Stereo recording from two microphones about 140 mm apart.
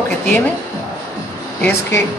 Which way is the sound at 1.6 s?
20° left (ahead or behind).